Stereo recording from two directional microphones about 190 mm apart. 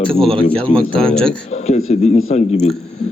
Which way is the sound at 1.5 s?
35° left (ahead or behind).